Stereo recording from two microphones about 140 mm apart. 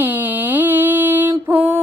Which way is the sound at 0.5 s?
15° right (ahead or behind).